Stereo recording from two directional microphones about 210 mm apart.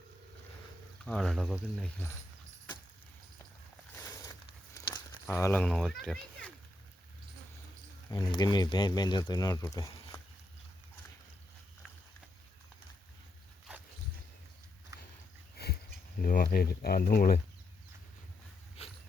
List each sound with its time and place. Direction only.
1.0 s speech: 5° left (ahead or behind)
3.9 s crumpling: 15° left (ahead or behind)
8.3 s speech: 20° left (ahead or behind)
14.9 s a sound: 15° right (ahead or behind)
15.5 s a sound: 50° left (ahead or behind)
16.2 s speech: 40° left (ahead or behind)